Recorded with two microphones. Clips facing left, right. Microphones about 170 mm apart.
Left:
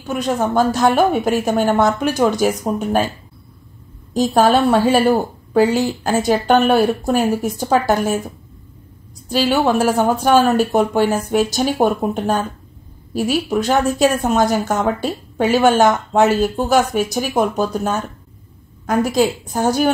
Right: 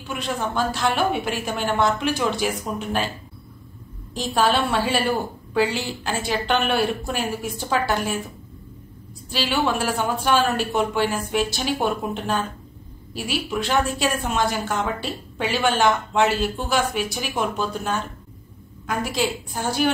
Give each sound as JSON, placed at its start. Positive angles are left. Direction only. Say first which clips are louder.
{"t": 0.0, "sound": "a woman's voice", "louder": "left 8 dB", "side_deg": 45}
{"t": 4.1, "sound": "a woman's voice", "louder": "left 7 dB", "side_deg": 45}
{"t": 9.3, "sound": "a woman's voice", "louder": "left 7 dB", "side_deg": 45}